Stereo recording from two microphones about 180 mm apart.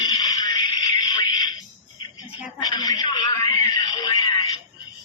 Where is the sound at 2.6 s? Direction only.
20° left (ahead or behind).